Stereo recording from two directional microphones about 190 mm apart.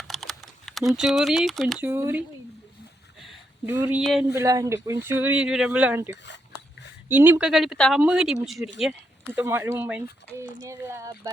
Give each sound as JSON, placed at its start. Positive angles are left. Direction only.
{"t": 0.1, "sound": "computer keyboard", "side_deg": 0}
{"t": 1.8, "sound": "speech", "side_deg": -15}
{"t": 3.2, "sound": "a sound", "side_deg": -5}
{"t": 4.0, "sound": "speech", "side_deg": 0}
{"t": 4.4, "sound": "speech", "side_deg": -15}